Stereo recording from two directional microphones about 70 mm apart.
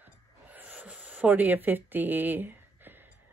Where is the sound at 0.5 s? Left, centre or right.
Right.